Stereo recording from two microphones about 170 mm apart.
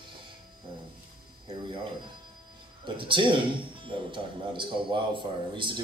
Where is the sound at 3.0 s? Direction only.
30° right (ahead or behind).